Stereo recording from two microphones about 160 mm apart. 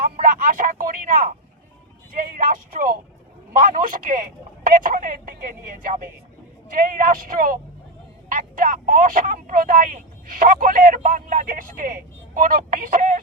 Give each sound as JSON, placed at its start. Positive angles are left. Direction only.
{"t": 0.0, "sound": "speech", "side_deg": -55}
{"t": 2.3, "sound": "speech", "side_deg": -60}